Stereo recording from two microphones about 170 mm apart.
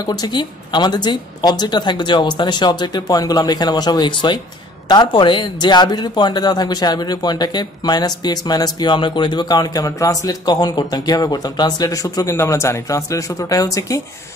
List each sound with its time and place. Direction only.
0.0 s a man's voice: 25° left (ahead or behind)